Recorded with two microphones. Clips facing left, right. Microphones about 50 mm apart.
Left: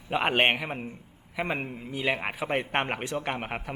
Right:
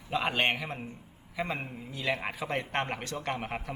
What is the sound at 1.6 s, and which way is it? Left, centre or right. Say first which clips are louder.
Speech: left 5 dB; left.